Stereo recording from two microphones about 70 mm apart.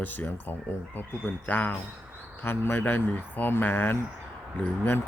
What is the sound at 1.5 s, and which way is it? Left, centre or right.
Speech, left.